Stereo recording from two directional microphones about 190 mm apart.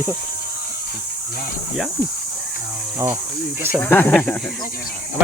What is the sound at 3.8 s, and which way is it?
Speech, 10° left (ahead or behind).